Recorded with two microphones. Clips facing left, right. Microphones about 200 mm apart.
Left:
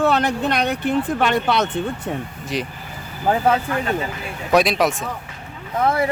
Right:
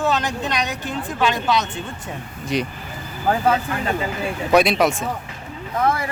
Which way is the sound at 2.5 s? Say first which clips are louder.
Right 3 dB; centre (ahead or behind).